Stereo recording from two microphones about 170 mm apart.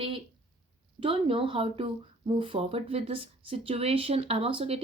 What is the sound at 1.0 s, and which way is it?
Speech, 30° right (ahead or behind).